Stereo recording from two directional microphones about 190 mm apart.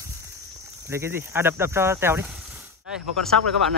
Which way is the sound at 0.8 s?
15° right (ahead or behind).